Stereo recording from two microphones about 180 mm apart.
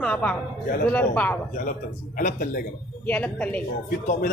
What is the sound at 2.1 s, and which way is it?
Speech, 50° left (ahead or behind).